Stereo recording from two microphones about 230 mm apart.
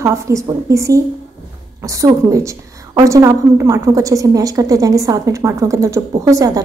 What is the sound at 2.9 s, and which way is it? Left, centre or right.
A woman's voice, centre.